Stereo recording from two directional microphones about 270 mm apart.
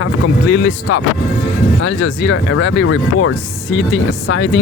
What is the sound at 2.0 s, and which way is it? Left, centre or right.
Speech, left.